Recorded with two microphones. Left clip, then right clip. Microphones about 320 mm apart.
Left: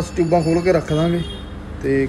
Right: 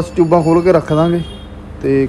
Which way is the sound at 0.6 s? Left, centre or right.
Right.